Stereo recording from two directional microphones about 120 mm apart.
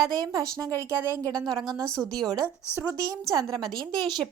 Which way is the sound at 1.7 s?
30° right (ahead or behind).